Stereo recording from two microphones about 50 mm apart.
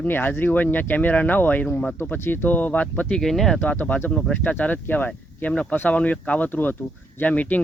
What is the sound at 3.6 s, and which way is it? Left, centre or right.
Speech, left.